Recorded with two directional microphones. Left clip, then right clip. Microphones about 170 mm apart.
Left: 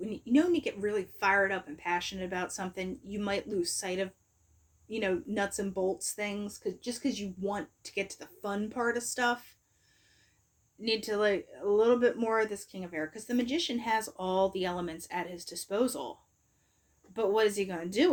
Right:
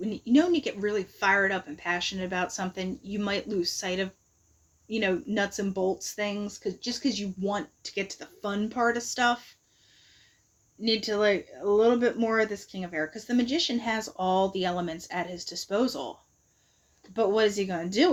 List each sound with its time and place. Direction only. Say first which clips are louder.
0.0 s speech: right 4 dB; 40° right (ahead or behind)
10.8 s speech: right 4 dB; 35° right (ahead or behind)
17.2 s speech: right 3 dB; 30° right (ahead or behind)